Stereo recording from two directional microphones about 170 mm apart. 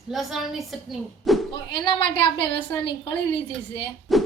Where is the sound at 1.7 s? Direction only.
30° left (ahead or behind).